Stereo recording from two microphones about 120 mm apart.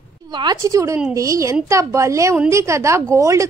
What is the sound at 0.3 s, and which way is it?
A woman's voice, 35° right (ahead or behind).